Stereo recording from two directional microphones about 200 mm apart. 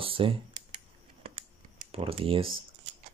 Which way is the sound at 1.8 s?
30° right (ahead or behind).